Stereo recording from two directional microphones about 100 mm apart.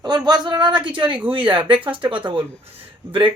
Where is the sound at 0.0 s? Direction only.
45° right (ahead or behind).